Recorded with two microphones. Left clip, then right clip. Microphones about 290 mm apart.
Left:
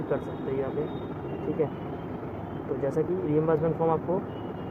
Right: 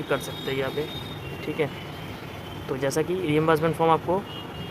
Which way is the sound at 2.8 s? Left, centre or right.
Right.